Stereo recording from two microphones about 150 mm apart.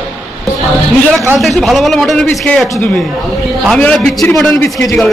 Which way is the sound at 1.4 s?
Centre (ahead or behind).